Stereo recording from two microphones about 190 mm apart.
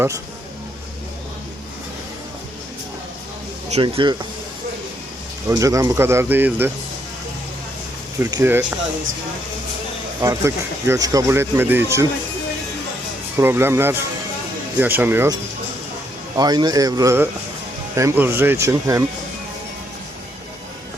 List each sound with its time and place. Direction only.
3.7 s speech: 30° right (ahead or behind)
5.5 s speech: 15° right (ahead or behind)
8.2 s speech: 15° right (ahead or behind)
10.2 s speech: 15° right (ahead or behind)
13.3 s speech: 10° right (ahead or behind)
16.4 s speech: 20° right (ahead or behind)